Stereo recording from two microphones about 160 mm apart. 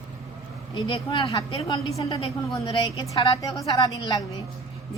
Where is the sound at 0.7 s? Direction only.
30° left (ahead or behind).